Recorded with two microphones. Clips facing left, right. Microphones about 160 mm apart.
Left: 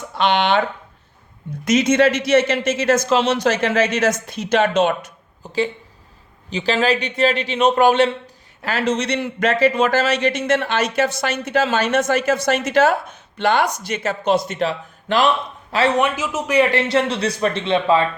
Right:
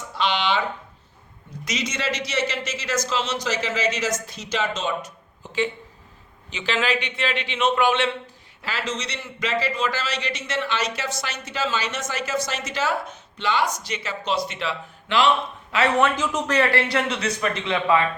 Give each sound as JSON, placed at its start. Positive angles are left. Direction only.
{"t": 0.2, "sound": "a man's voice", "side_deg": 55}
{"t": 1.6, "sound": "a man's voice", "side_deg": 50}
{"t": 5.4, "sound": "a sound", "side_deg": 35}
{"t": 6.5, "sound": "a man's voice", "side_deg": 35}
{"t": 8.6, "sound": "a man's voice", "side_deg": 55}
{"t": 16.0, "sound": "speech", "side_deg": 10}
{"t": 16.9, "sound": "a man's voice", "side_deg": 30}